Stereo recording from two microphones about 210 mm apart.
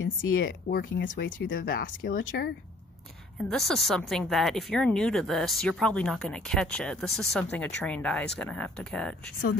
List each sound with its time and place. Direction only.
0.5 s speech: 50° left (ahead or behind)
3.4 s speech: centre (ahead or behind)